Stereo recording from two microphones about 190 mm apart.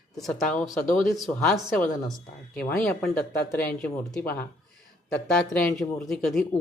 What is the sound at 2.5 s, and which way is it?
Speech, 55° left (ahead or behind).